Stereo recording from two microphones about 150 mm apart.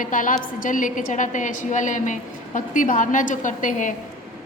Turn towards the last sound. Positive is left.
turn(degrees=60)  # may be behind; listen again after turning